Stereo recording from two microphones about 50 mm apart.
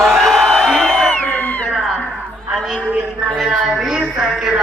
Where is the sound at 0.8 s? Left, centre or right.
Centre.